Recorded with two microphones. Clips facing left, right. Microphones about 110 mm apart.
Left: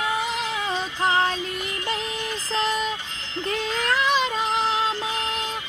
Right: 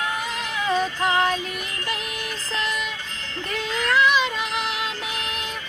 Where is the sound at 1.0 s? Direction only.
30° left (ahead or behind).